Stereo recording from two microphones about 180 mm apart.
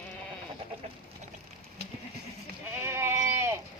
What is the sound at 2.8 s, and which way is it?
Goat, 15° right (ahead or behind).